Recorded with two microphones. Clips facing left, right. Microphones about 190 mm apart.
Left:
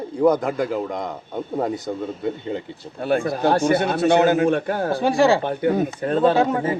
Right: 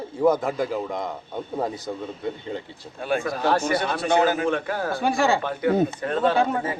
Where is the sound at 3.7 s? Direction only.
60° left (ahead or behind).